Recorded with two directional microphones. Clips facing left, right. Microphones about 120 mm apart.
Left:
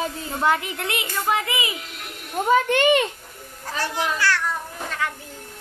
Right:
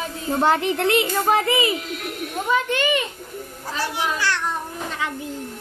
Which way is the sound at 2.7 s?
65° left (ahead or behind).